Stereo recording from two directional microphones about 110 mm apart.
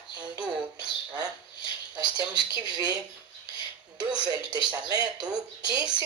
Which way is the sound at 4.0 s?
40° right (ahead or behind).